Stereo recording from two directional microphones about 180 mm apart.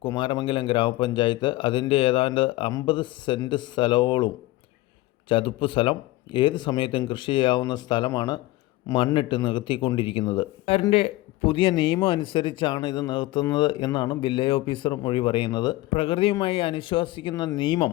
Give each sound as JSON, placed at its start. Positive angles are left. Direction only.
{"t": 0.0, "sound": "a man's voice", "side_deg": 25}
{"t": 5.3, "sound": "a man's voice", "side_deg": 30}